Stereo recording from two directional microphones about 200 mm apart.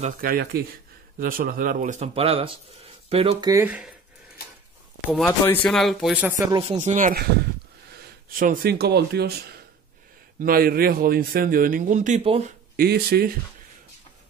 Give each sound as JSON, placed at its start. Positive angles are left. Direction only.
{"t": 0.0, "sound": "speech", "side_deg": -45}
{"t": 5.4, "sound": "speech", "side_deg": 10}
{"t": 6.8, "sound": "speech", "side_deg": -40}
{"t": 8.4, "sound": "speech", "side_deg": -50}
{"t": 10.4, "sound": "speech", "side_deg": -45}
{"t": 12.8, "sound": "speech", "side_deg": -50}